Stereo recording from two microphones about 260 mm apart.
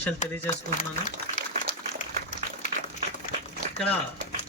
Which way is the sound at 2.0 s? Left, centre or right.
Left.